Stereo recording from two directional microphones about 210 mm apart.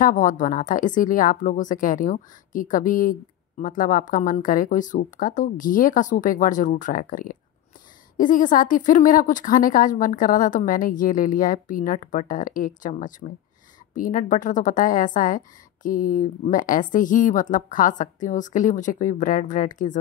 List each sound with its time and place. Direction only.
0.0 s a woman's voice: 40° left (ahead or behind)